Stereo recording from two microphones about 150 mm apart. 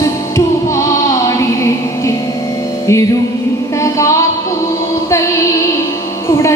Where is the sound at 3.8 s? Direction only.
20° left (ahead or behind).